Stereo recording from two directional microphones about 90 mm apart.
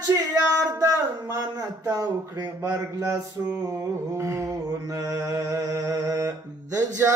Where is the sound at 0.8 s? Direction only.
35° right (ahead or behind).